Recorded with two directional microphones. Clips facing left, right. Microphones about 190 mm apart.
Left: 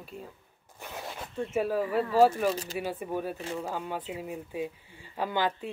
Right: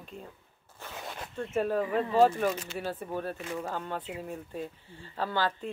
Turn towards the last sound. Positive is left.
turn(degrees=15)  # may be behind; listen again after turning